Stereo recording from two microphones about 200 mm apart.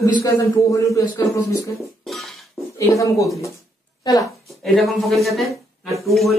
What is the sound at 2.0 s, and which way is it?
Dishes, centre (ahead or behind).